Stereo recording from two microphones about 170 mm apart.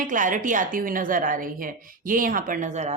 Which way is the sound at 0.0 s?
50° right (ahead or behind).